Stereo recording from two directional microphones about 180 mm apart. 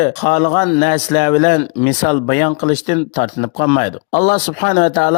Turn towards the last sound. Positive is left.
turn(degrees=45)  # may be behind; listen again after turning